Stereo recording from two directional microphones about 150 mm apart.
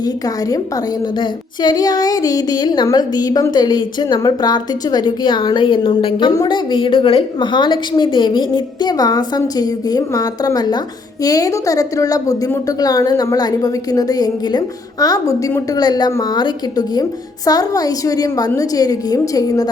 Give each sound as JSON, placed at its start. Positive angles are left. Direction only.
{"t": 1.2, "sound": "a woman's voice", "side_deg": 25}